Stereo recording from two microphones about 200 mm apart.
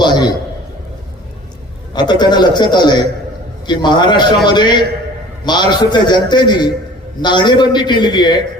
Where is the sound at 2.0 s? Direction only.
20° left (ahead or behind).